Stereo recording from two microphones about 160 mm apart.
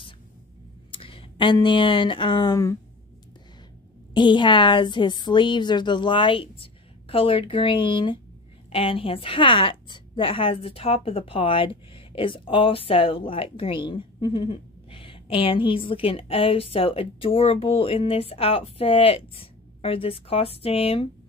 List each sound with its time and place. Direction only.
0.9 s speech: 35° left (ahead or behind)
4.1 s a woman's voice: 30° left (ahead or behind)